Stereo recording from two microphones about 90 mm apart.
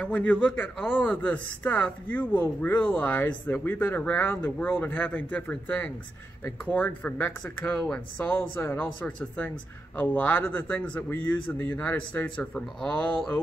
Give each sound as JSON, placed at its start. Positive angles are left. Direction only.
{"t": 0.0, "sound": "speech", "side_deg": 15}